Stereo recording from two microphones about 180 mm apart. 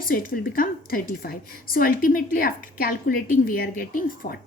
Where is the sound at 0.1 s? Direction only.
55° left (ahead or behind).